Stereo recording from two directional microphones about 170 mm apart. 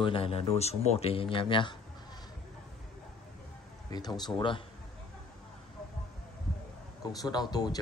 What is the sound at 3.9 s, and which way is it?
Speech, 25° left (ahead or behind).